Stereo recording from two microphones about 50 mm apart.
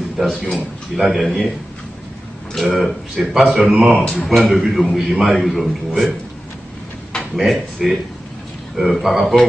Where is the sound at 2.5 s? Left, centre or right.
Centre.